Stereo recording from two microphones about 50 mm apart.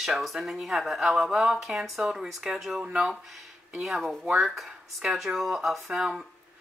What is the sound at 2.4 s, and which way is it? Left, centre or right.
Speech, centre.